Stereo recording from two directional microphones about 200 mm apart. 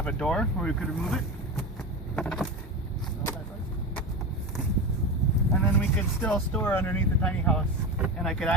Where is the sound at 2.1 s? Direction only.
5° left (ahead or behind).